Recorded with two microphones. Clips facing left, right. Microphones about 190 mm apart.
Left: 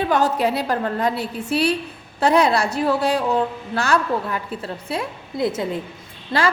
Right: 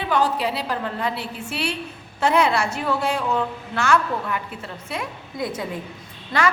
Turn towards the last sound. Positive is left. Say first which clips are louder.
# left 2 dB
turn(degrees=30)  # may be behind; listen again after turning